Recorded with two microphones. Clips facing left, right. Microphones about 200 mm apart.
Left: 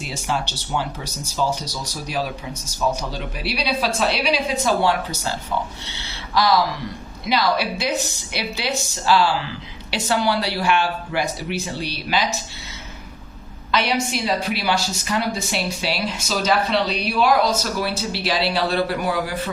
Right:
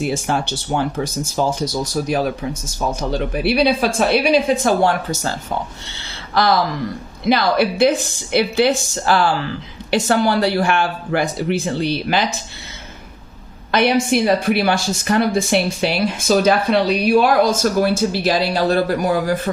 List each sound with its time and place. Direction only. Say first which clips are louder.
0.0 s speech: right 6 dB; 50° right (ahead or behind)
6.3 s speech: right 2 dB; 55° right (ahead or behind)
13.7 s speech: right 6 dB; 55° right (ahead or behind)